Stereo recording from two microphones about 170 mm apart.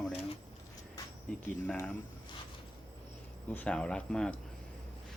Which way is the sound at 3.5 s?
5° left (ahead or behind).